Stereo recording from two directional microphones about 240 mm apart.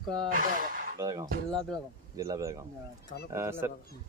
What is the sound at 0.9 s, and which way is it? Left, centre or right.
Speech, centre.